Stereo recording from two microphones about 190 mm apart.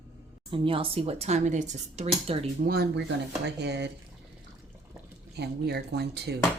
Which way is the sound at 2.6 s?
55° right (ahead or behind).